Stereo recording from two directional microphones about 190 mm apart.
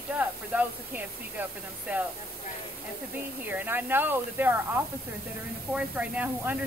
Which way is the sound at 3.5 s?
10° right (ahead or behind).